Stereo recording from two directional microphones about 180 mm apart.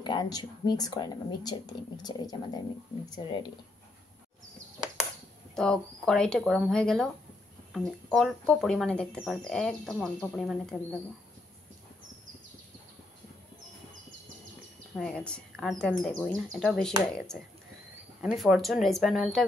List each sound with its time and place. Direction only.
0.0 s speech: 25° left (ahead or behind)
5.6 s speech: 5° left (ahead or behind)
15.0 s speech: 5° left (ahead or behind)
18.2 s speech: centre (ahead or behind)